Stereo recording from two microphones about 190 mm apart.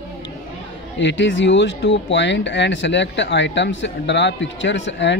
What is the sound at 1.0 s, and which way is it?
Speech, 70° left (ahead or behind).